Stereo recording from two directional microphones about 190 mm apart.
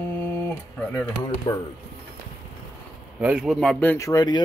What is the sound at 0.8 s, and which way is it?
Speech, 10° left (ahead or behind).